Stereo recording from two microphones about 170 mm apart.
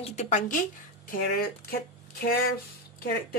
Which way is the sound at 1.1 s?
60° left (ahead or behind).